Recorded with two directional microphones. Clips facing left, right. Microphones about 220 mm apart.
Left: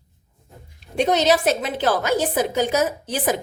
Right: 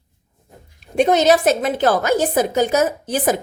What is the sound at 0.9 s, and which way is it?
A woman's voice, 50° right (ahead or behind).